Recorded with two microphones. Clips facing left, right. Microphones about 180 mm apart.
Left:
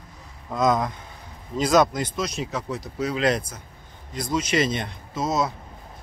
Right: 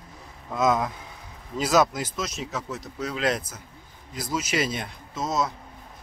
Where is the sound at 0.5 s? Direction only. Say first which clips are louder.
Left 1 dB; 5° right (ahead or behind).